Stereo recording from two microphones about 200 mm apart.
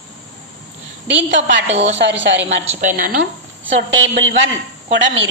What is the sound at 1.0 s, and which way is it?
A woman's voice, 65° right (ahead or behind).